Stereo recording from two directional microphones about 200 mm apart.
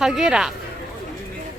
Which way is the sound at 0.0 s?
5° right (ahead or behind).